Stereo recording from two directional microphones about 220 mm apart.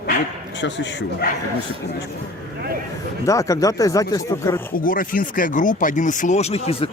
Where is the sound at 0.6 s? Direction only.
55° left (ahead or behind).